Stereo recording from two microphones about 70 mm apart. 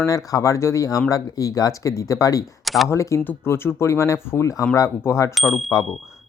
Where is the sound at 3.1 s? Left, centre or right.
Left.